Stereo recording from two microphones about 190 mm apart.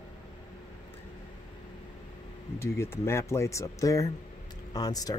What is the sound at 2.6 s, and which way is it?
Speech, 15° left (ahead or behind).